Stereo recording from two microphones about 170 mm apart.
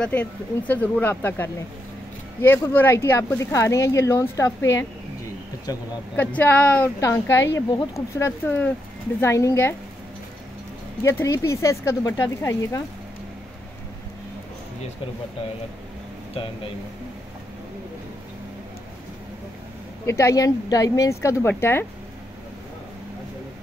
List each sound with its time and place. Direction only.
0.0 s speech: 10° left (ahead or behind)
6.1 s speech: 10° left (ahead or behind)
11.0 s speech: 15° left (ahead or behind)
20.1 s speech: 15° left (ahead or behind)